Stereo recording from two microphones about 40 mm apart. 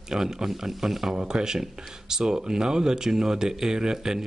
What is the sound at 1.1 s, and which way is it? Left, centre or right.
Speech, centre.